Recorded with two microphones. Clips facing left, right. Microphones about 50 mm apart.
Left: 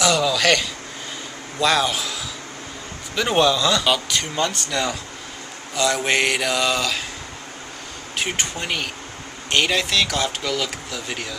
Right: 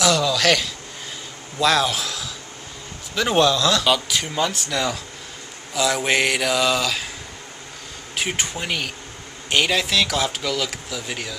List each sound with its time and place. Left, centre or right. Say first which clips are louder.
0.0 s a sound: even; centre
1.6 s a man's voice: even; centre
8.2 s speech: even; centre